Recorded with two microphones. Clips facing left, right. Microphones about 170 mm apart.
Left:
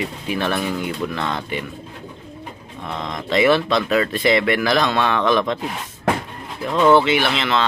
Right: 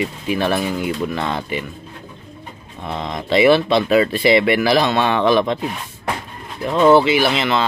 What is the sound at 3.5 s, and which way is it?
Speech, 30° right (ahead or behind).